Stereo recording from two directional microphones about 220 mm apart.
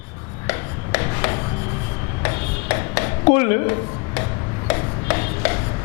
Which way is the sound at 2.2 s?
15° left (ahead or behind).